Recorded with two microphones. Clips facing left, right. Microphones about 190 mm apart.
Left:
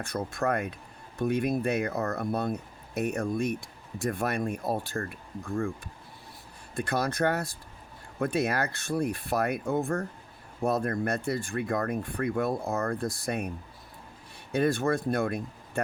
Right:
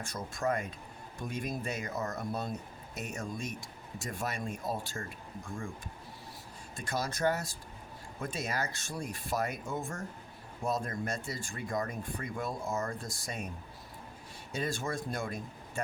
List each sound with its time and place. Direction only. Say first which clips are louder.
0.0 s speech: left 5 dB; 60° left (ahead or behind)
6.7 s speech: left 7 dB; 60° left (ahead or behind)
14.5 s speech: left 10 dB; 60° left (ahead or behind)